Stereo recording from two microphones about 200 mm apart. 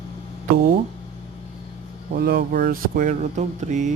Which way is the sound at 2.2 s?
45° right (ahead or behind).